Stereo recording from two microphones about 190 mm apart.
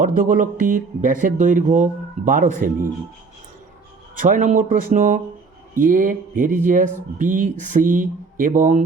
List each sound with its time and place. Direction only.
0.0 s speech: 45° right (ahead or behind)
4.2 s speech: 40° right (ahead or behind)